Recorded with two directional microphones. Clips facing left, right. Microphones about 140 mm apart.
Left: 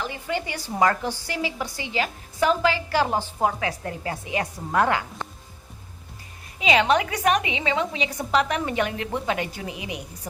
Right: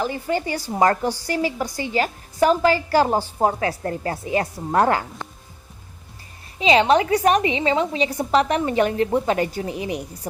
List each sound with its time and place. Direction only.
0.0 s a woman's voice: 40° right (ahead or behind)
6.6 s a woman's voice: 30° right (ahead or behind)